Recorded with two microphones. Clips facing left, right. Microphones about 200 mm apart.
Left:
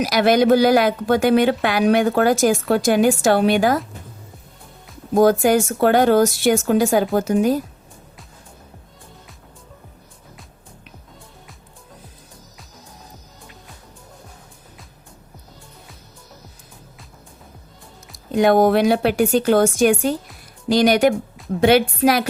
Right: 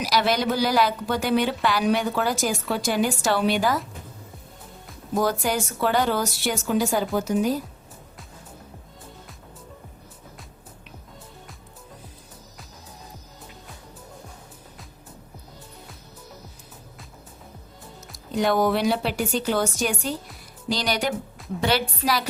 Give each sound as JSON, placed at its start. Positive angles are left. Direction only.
{"t": 0.0, "sound": "a woman's voice", "side_deg": 55}
{"t": 5.1, "sound": "a woman's voice", "side_deg": 50}
{"t": 18.3, "sound": "a woman's voice", "side_deg": 55}